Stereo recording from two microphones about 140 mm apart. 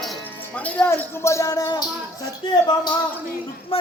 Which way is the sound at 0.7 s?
15° left (ahead or behind).